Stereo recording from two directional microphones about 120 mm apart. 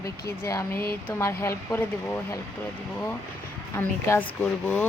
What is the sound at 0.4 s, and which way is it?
Speech, 25° left (ahead or behind).